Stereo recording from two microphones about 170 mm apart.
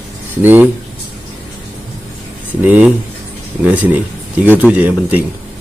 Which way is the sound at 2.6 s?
10° right (ahead or behind).